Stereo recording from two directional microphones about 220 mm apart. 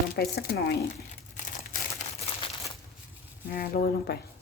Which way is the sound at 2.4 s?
25° left (ahead or behind).